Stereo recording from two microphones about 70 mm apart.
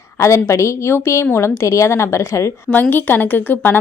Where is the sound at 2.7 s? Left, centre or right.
Left.